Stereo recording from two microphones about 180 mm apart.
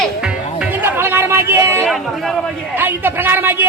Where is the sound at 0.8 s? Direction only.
15° right (ahead or behind).